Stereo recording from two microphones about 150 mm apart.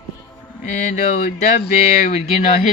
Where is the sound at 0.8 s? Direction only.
55° left (ahead or behind).